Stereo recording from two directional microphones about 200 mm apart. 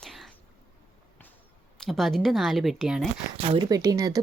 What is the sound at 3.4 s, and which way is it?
Speech, 25° right (ahead or behind).